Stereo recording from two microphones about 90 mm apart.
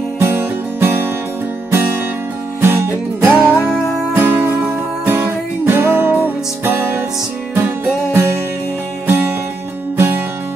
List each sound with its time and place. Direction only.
0.2 s music: 25° right (ahead or behind)
2.6 s music: 25° right (ahead or behind)